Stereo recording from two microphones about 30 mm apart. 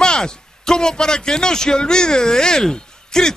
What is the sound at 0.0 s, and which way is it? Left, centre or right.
A man's voice, left.